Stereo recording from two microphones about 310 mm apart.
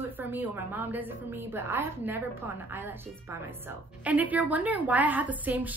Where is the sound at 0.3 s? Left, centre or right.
Centre.